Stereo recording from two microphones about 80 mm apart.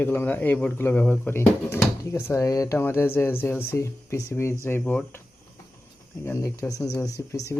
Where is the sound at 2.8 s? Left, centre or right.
Left.